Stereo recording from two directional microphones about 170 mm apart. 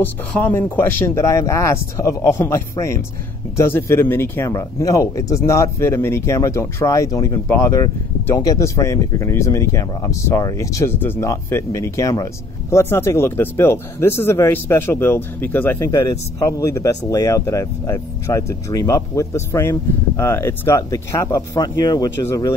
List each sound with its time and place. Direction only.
0.0 s speech: 10° left (ahead or behind)